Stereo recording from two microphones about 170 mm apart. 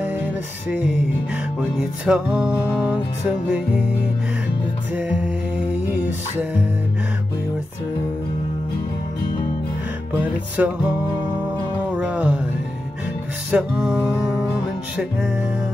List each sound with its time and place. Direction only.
0.0 s music: 5° right (ahead or behind)
10.1 s music: 10° right (ahead or behind)
12.0 s music: 5° right (ahead or behind)
13.5 s music: 5° right (ahead or behind)